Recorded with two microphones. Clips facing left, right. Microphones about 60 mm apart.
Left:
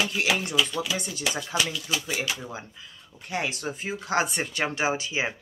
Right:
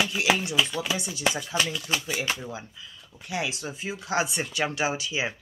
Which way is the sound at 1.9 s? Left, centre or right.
Right.